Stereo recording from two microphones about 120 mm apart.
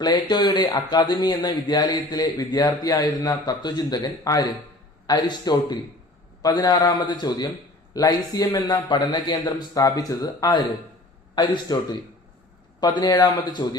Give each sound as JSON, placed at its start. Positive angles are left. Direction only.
{"t": 0.0, "sound": "a man's voice", "side_deg": 35}